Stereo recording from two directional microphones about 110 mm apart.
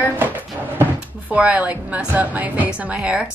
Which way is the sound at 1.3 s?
15° right (ahead or behind).